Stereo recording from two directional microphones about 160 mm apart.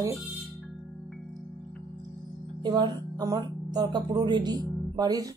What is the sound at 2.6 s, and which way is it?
Speech, 25° right (ahead or behind).